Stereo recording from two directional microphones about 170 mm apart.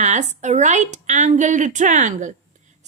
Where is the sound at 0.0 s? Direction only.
45° right (ahead or behind).